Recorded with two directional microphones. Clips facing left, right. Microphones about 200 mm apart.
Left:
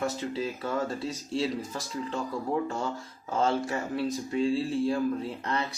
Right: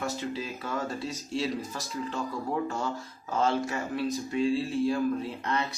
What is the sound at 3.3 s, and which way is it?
Speech, 30° left (ahead or behind).